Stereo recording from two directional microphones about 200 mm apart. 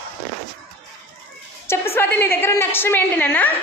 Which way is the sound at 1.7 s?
10° left (ahead or behind).